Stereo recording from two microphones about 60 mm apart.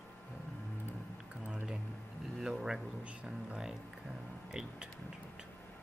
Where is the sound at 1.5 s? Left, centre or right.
Centre.